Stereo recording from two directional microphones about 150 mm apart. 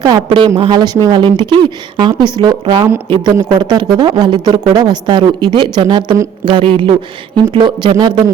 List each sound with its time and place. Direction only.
0.0 s speech: 30° right (ahead or behind)